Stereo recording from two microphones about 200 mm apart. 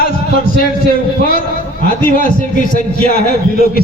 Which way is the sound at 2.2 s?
45° left (ahead or behind).